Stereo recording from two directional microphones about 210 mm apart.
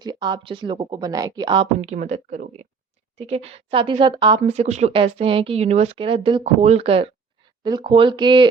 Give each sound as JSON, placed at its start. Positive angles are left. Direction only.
{"t": 0.0, "sound": "speech", "side_deg": -20}